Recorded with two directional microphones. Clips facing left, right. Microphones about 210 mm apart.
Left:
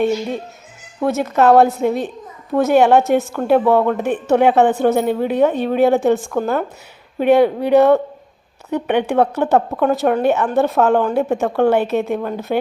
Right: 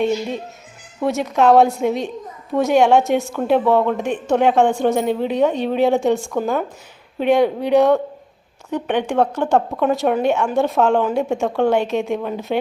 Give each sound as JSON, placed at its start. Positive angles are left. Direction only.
{"t": 1.0, "sound": "a woman's voice", "side_deg": 0}